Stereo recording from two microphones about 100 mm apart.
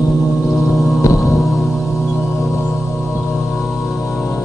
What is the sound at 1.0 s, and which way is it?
Music, 30° left (ahead or behind).